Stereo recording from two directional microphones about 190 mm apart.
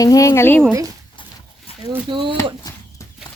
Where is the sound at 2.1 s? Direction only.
25° right (ahead or behind).